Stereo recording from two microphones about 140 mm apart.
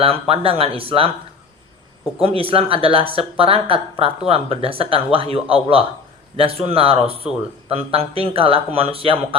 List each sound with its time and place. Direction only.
0.0 s speech: 40° right (ahead or behind)
2.2 s speech: 40° right (ahead or behind)